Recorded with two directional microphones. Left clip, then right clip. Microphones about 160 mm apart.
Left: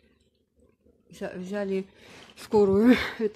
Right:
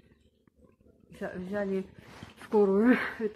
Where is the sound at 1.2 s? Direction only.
40° left (ahead or behind).